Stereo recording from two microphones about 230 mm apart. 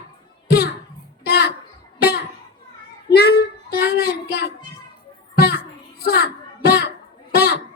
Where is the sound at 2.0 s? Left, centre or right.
Left.